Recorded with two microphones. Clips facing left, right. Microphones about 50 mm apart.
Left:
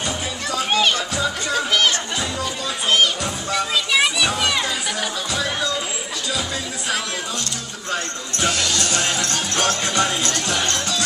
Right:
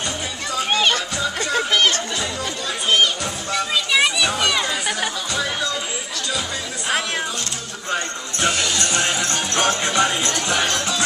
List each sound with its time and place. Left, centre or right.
0.5 s music: centre
1.5 s a sound: centre
2.9 s music: centre
7.9 s music: centre